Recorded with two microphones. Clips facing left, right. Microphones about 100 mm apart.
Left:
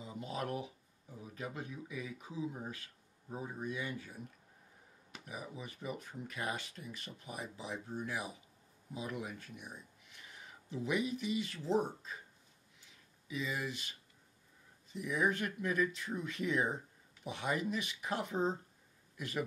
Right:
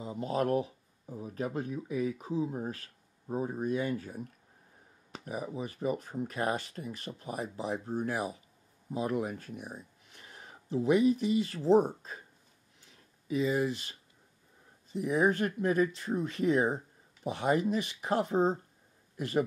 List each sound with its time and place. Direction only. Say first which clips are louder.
0.0 s speech: right 9 dB; 40° right (ahead or behind)
12.8 s a sound: right 9 dB; 40° right (ahead or behind)
15.0 s a man's voice: right 7 dB; 35° right (ahead or behind)